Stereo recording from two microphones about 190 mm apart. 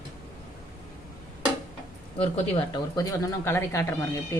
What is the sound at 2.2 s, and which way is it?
Speech, 30° left (ahead or behind).